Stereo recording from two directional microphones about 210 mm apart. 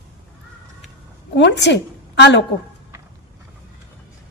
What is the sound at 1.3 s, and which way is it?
A woman's voice, 55° left (ahead or behind).